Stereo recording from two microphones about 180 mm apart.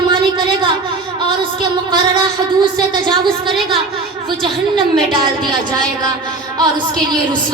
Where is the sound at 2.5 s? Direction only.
25° right (ahead or behind).